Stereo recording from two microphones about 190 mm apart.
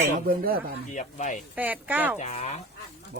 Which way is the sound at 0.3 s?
50° right (ahead or behind).